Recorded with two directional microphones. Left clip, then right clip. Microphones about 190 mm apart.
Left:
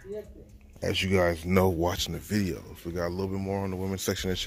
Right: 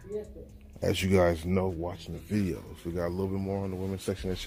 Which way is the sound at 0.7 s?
10° right (ahead or behind).